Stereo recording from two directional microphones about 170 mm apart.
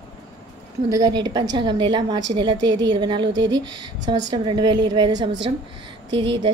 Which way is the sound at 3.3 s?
90° right.